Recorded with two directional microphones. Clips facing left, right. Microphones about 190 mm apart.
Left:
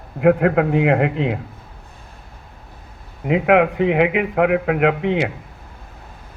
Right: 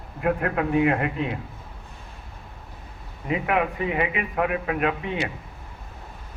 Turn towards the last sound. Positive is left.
turn(degrees=90)